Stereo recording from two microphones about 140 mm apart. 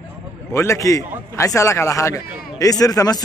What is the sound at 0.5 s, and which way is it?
A man's voice, 20° left (ahead or behind).